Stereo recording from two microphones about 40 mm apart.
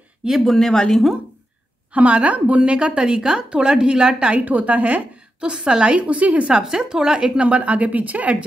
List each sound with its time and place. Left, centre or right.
0.5 s speech: centre
2.0 s a woman's voice: right
3.0 s a woman's voice: centre
4.3 s a woman's voice: right
5.4 s a woman's voice: right
6.5 s a woman's voice: centre; by 8.5 s right